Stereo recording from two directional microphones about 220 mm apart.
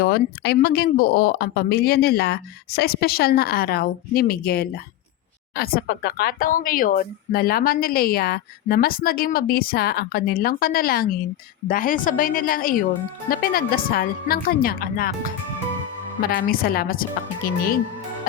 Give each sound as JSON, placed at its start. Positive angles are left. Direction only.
{"t": 0.0, "sound": "a woman's voice", "side_deg": 45}
{"t": 16.3, "sound": "a woman's voice", "side_deg": 40}